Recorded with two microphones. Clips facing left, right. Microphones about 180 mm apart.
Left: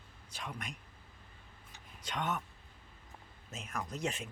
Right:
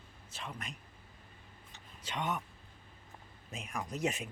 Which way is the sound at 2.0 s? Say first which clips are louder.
Even; 10° right (ahead or behind).